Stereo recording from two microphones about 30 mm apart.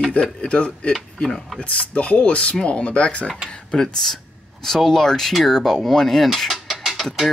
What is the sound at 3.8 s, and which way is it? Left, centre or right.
Speech, centre.